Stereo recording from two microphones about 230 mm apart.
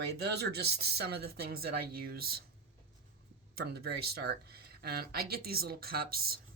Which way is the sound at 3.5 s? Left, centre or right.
Right.